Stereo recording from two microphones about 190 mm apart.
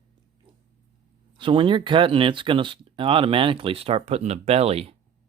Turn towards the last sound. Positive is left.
turn(degrees=-30)  # may be behind; listen again after turning